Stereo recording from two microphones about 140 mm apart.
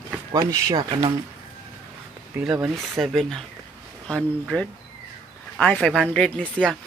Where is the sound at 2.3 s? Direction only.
5° right (ahead or behind).